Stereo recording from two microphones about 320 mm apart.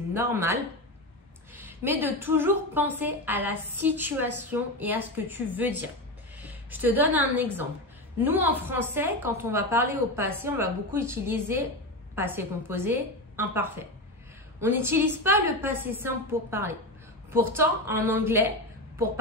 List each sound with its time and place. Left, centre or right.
0.1 s a woman's voice: centre